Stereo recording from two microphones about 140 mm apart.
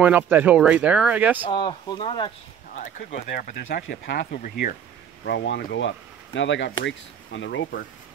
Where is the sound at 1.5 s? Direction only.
35° left (ahead or behind).